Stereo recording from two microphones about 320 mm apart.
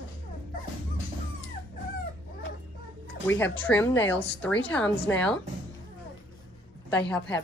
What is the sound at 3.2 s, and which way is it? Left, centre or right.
A woman's voice, centre.